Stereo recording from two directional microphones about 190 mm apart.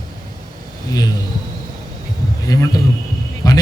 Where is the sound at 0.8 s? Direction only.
20° left (ahead or behind).